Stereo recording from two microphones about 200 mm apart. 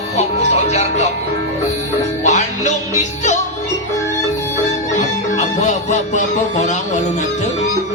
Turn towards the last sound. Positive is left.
turn(degrees=35)  # may be behind; listen again after turning